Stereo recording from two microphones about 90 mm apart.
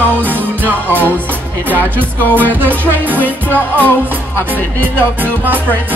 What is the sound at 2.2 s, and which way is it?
Music, 20° left (ahead or behind).